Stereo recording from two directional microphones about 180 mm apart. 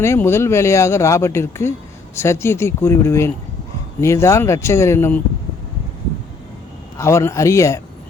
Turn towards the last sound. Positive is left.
turn(degrees=15)  # may be behind; listen again after turning